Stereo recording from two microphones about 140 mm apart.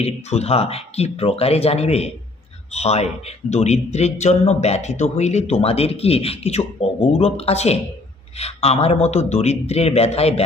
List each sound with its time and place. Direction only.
0.0 s a man's voice: 50° left (ahead or behind)